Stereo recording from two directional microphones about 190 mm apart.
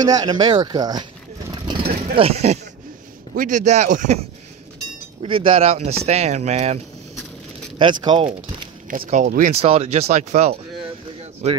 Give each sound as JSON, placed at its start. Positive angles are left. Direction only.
{"t": 0.0, "sound": "speech", "side_deg": -20}
{"t": 2.1, "sound": "speech", "side_deg": -30}
{"t": 5.2, "sound": "speech", "side_deg": -30}
{"t": 7.8, "sound": "speech", "side_deg": -25}
{"t": 9.0, "sound": "speech", "side_deg": -40}